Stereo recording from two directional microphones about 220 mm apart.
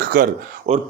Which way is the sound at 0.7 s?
30° right (ahead or behind).